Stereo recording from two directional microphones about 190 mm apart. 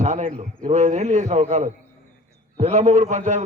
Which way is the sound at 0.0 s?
40° right (ahead or behind).